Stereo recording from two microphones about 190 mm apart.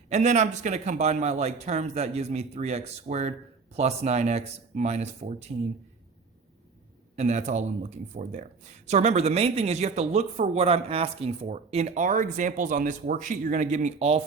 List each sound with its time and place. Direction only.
0.1 s speech: 35° right (ahead or behind)
7.2 s speech: 40° right (ahead or behind)